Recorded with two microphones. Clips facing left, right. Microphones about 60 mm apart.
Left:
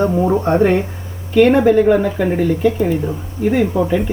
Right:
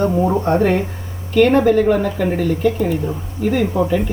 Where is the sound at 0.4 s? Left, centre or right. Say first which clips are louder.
Left 2 dB; centre.